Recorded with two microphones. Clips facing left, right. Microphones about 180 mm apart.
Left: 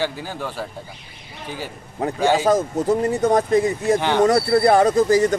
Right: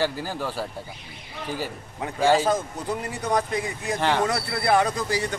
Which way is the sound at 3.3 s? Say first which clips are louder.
Left 8 dB; 45° left (ahead or behind).